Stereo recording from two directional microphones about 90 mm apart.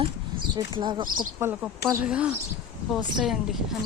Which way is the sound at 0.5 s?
60° right (ahead or behind).